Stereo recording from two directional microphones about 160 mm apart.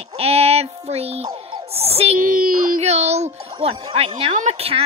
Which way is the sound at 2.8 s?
40° right (ahead or behind).